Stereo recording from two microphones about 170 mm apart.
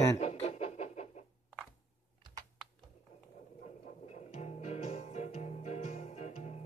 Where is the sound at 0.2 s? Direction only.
40° left (ahead or behind).